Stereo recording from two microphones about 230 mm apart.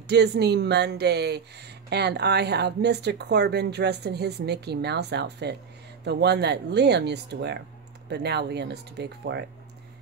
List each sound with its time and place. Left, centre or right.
0.0 s speech: right